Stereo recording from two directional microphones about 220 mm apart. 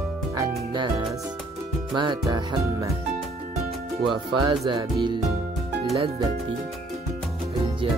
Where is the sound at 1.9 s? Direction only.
20° right (ahead or behind).